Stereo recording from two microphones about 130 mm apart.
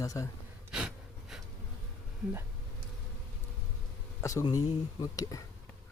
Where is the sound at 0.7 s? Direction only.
5° right (ahead or behind).